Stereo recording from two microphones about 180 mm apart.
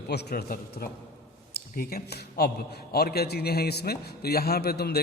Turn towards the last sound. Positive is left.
turn(degrees=60)  # may be behind; listen again after turning